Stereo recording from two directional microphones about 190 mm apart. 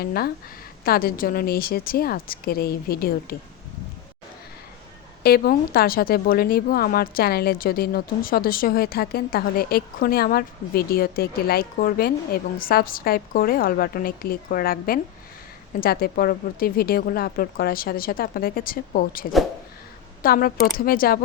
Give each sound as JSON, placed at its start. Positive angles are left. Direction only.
{"t": 0.0, "sound": "speech", "side_deg": 55}
{"t": 5.2, "sound": "speech", "side_deg": 55}